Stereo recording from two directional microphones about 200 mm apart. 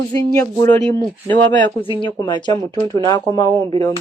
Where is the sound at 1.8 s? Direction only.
25° left (ahead or behind).